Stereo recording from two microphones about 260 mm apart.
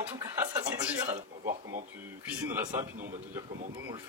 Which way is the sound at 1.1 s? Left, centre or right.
Right.